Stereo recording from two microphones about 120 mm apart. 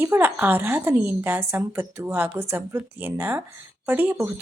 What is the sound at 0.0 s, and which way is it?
A woman's voice, 15° right (ahead or behind).